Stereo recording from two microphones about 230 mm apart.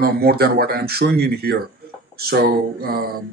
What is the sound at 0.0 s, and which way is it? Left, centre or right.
Speech, right.